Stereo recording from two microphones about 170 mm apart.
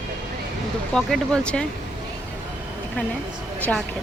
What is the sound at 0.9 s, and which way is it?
Speech, 5° left (ahead or behind).